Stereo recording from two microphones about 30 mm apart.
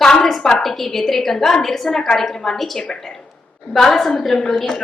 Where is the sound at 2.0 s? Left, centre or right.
Centre.